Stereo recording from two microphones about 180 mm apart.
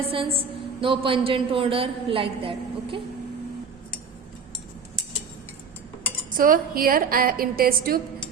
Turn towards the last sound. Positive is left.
turn(degrees=-55)  # may be behind; listen again after turning